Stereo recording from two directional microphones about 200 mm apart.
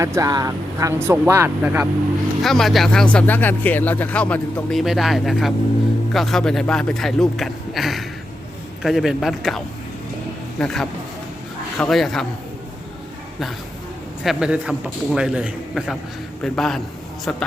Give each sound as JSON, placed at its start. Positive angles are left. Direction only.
{"t": 0.0, "sound": "speech", "side_deg": -15}
{"t": 14.3, "sound": "speech", "side_deg": -5}